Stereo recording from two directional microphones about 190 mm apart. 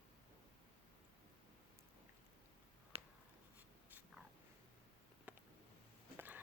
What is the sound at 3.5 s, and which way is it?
Writing, 10° right (ahead or behind).